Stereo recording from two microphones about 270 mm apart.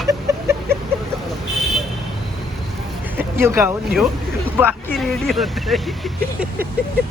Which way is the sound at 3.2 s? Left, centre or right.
Centre.